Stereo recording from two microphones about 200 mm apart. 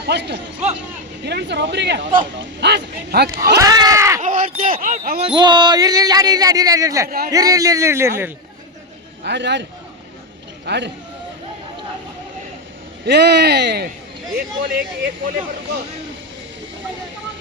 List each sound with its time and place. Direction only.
0.0 s speech: 55° right (ahead or behind)
3.2 s a man's voice: 15° right (ahead or behind)
4.2 s a man's voice: 40° right (ahead or behind); by 8.3 s 15° right (ahead or behind)
9.2 s speech: 60° right (ahead or behind)
10.7 s speech: 60° right (ahead or behind)
13.1 s speech: 55° right (ahead or behind)